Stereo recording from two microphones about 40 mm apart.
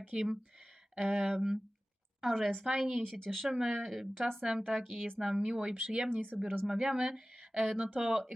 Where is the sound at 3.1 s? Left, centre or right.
Centre.